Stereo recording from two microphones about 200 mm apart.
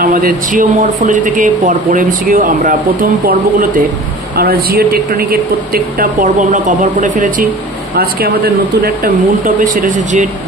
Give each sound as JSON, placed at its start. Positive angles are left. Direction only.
{"t": 0.0, "sound": "speech", "side_deg": -45}